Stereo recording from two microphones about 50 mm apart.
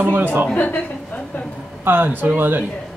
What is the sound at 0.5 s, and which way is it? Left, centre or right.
Speech, left.